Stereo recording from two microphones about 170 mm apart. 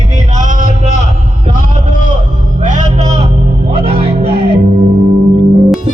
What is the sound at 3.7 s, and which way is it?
Music, 35° right (ahead or behind).